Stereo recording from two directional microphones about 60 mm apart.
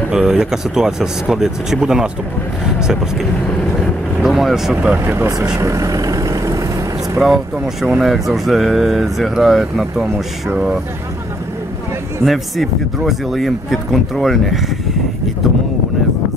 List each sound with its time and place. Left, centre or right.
0.1 s speech: centre
4.8 s speech: right
5.6 s vehicle: right
7.2 s speech: centre
12.3 s speech: centre